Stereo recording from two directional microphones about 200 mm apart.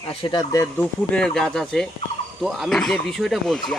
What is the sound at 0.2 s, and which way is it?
Speech, 20° left (ahead or behind).